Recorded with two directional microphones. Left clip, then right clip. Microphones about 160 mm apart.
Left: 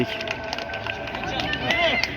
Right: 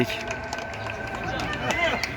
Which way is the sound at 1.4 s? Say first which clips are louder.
Left 3 dB; 20° right (ahead or behind).